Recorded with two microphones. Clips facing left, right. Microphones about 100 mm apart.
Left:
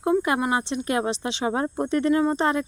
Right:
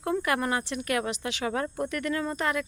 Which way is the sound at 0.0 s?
20° left (ahead or behind).